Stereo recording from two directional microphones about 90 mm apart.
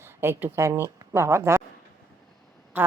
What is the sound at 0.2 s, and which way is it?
Speech, 25° right (ahead or behind).